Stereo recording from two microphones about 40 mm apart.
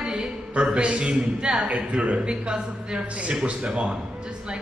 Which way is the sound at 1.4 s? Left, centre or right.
Centre.